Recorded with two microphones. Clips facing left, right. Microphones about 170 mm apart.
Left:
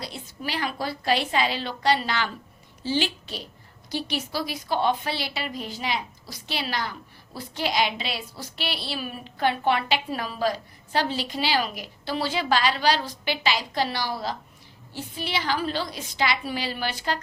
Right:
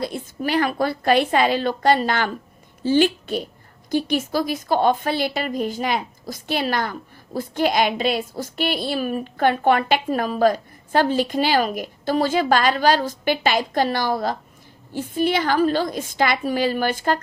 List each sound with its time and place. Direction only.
0.0 s a woman's voice: 50° right (ahead or behind)